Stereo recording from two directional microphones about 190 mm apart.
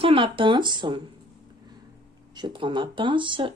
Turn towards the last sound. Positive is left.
turn(degrees=-25)  # may be behind; listen again after turning